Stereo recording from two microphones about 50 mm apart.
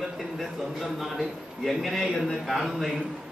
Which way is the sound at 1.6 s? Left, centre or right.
Centre.